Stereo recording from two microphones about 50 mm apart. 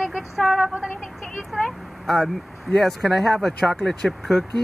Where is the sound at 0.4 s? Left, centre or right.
Centre.